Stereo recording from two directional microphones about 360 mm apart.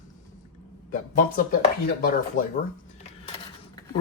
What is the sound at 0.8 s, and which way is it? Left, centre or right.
Speech, left.